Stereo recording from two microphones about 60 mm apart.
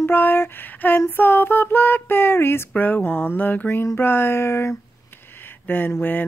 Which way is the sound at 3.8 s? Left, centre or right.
Left.